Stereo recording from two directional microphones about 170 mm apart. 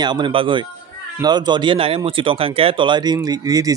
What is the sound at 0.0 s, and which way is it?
Speech, 25° right (ahead or behind).